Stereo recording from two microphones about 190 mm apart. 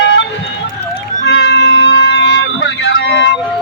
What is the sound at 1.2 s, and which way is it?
Music, 65° left (ahead or behind).